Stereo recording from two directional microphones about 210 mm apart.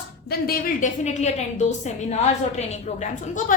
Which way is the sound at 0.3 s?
45° left (ahead or behind).